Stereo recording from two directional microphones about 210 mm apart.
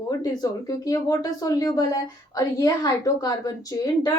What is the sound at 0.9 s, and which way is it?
A woman's voice, 15° left (ahead or behind).